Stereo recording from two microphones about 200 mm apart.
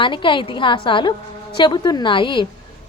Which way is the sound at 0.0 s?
25° left (ahead or behind).